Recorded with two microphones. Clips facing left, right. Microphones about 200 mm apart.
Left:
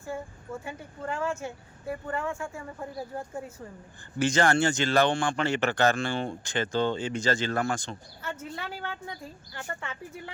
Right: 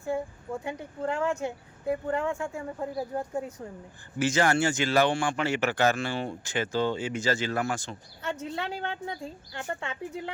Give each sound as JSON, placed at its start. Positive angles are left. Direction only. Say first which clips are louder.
{"t": 0.6, "sound": "speech", "louder": "right 5 dB", "side_deg": -20}
{"t": 4.2, "sound": "speech", "louder": "left 1 dB", "side_deg": -5}
{"t": 8.4, "sound": "speech", "louder": "right 4 dB", "side_deg": -20}